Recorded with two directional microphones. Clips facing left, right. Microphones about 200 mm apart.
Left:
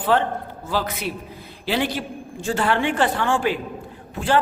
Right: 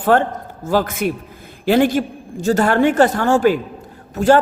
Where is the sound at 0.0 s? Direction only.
45° right (ahead or behind).